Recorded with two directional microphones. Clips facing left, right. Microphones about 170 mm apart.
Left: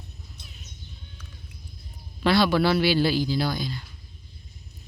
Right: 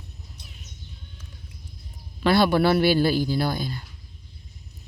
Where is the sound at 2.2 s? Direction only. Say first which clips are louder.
Right 2 dB; 50° right (ahead or behind).